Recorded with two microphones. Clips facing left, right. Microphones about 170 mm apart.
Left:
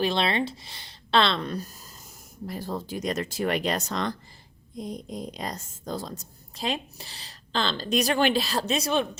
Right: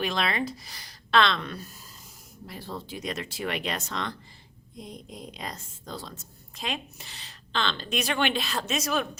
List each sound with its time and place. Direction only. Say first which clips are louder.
0.0 s a woman's voice: left 3 dB; 30° left (ahead or behind)